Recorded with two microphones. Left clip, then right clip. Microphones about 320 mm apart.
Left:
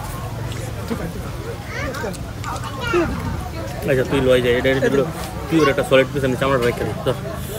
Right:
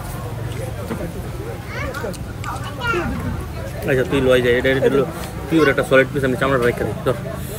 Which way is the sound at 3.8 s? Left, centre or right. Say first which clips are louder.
Even; centre.